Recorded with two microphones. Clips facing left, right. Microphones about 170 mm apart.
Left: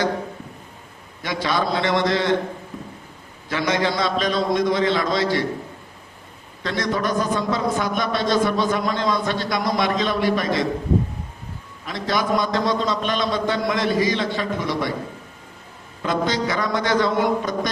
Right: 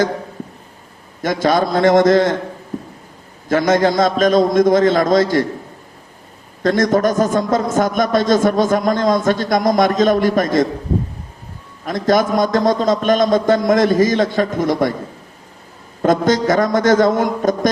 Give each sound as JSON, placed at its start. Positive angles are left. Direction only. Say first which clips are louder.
{"t": 1.2, "sound": "a man's voice", "louder": "right 7 dB", "side_deg": -45}
{"t": 2.7, "sound": "a sound", "louder": "right 8 dB", "side_deg": -40}
{"t": 3.5, "sound": "a man's voice", "louder": "right 8 dB", "side_deg": -45}
{"t": 6.6, "sound": "a man's voice", "louder": "right 9 dB", "side_deg": -45}
{"t": 11.9, "sound": "a man's voice", "louder": "right 7 dB", "side_deg": -45}
{"t": 16.0, "sound": "a man's voice", "louder": "right 8 dB", "side_deg": -45}